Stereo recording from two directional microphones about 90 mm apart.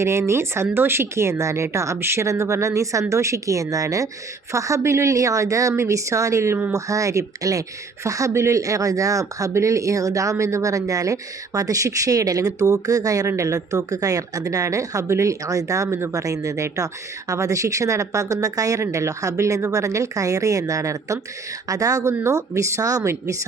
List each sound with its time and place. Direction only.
0.0 s speech: 30° right (ahead or behind)